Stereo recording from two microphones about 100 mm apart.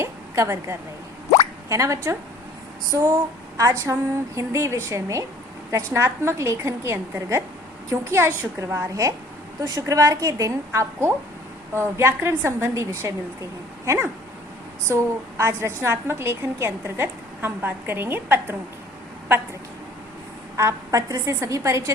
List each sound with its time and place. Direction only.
0.0 s a sound: 25° right (ahead or behind)
1.7 s a woman's voice: 30° right (ahead or behind)
20.6 s a woman's voice: 30° right (ahead or behind)